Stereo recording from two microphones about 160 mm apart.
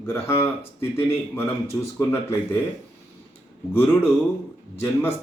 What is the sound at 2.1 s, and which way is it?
Speech, 15° left (ahead or behind).